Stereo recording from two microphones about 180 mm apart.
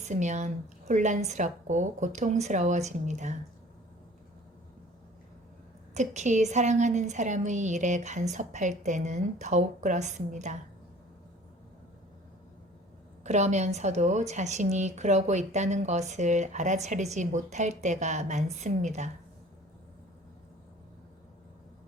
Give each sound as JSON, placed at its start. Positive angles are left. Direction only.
{"t": 0.0, "sound": "a woman's voice", "side_deg": -40}
{"t": 5.9, "sound": "a woman's voice", "side_deg": -40}
{"t": 13.2, "sound": "a woman's voice", "side_deg": -40}